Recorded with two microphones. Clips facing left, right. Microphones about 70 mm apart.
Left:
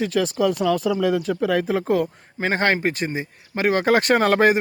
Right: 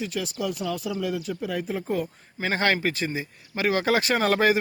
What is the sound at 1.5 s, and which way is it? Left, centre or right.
Speech, left.